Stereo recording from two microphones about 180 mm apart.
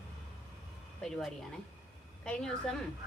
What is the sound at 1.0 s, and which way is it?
A woman's voice, 5° left (ahead or behind).